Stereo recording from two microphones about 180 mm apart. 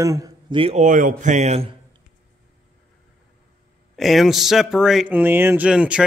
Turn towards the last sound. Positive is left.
turn(degrees=-5)  # may be behind; listen again after turning